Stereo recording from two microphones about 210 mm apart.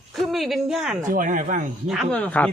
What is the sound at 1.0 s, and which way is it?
Speech, 40° right (ahead or behind).